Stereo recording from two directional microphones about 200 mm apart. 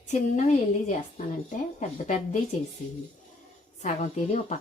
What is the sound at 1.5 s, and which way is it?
Speech, 35° left (ahead or behind).